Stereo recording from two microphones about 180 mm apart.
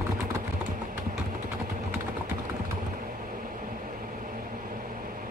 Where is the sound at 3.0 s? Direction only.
50° right (ahead or behind).